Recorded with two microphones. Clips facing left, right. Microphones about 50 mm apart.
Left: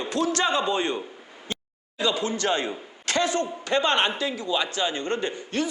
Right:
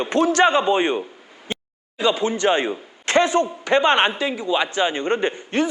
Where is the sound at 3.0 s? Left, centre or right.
Right.